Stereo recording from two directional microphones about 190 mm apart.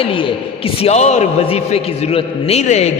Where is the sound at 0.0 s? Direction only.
25° left (ahead or behind).